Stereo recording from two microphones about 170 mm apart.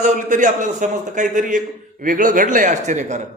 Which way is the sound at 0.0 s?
50° right (ahead or behind).